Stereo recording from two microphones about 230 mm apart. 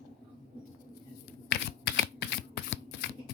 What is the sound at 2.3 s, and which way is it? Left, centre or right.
Shuffling cards, left.